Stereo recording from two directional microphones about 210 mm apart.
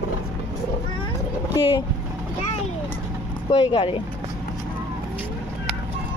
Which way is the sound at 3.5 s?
20° left (ahead or behind).